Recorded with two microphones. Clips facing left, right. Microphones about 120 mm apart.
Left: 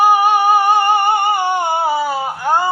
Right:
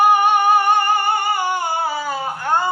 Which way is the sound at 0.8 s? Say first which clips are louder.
Left 4 dB; 20° left (ahead or behind).